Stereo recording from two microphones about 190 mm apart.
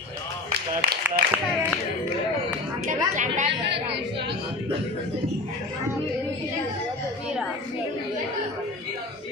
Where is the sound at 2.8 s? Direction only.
40° right (ahead or behind).